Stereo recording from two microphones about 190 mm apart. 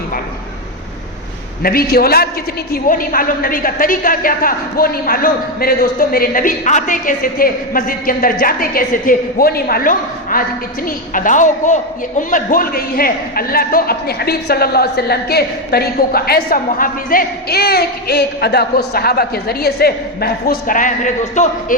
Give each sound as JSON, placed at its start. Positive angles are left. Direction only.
{"t": 1.6, "sound": "a man's voice", "side_deg": 55}